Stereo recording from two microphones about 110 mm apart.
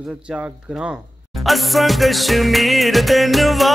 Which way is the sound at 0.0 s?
10° right (ahead or behind).